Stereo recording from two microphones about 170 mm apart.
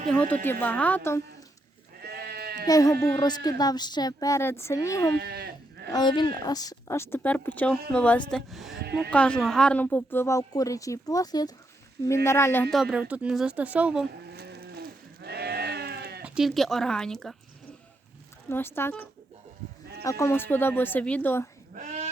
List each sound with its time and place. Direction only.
0.1 s a woman's voice: 10° left (ahead or behind)
2.0 s sheep: 70° right (ahead or behind)
2.6 s a woman's voice: 20° left (ahead or behind)
5.1 s speech: 70° right (ahead or behind)
5.9 s a woman's voice: 25° left (ahead or behind)
12.7 s speech: 5° right (ahead or behind)
14.3 s sheep: 75° right (ahead or behind)
16.2 s speech: 5° right (ahead or behind)
18.4 s a woman's voice: 15° left (ahead or behind)
21.8 s dog: 45° right (ahead or behind)